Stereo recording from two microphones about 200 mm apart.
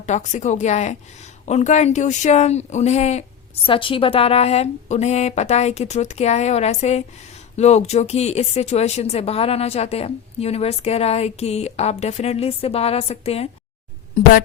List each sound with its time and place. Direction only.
0.0 s speech: 35° left (ahead or behind)